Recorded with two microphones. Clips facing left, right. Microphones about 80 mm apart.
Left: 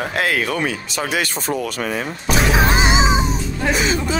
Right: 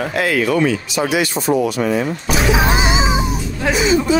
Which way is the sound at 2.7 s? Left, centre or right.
Left.